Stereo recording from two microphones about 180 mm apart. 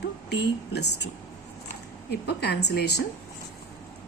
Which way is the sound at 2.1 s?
65° left (ahead or behind).